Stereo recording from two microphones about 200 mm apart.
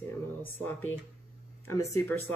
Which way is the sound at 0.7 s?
10° left (ahead or behind).